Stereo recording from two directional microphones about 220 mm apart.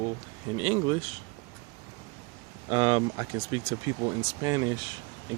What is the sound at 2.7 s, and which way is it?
Speech, 25° right (ahead or behind).